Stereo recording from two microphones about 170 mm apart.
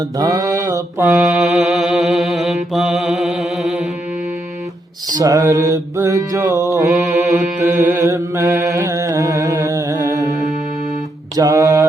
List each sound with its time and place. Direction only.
0.2 s mantra: 20° right (ahead or behind)
1.2 s mantra: centre (ahead or behind)
5.1 s mantra: 20° right (ahead or behind)
11.3 s mantra: 20° right (ahead or behind)